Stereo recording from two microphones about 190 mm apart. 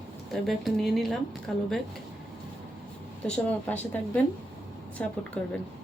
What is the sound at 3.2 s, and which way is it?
Speech, 5° left (ahead or behind).